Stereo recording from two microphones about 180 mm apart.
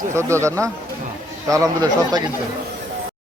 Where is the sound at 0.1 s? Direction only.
15° right (ahead or behind).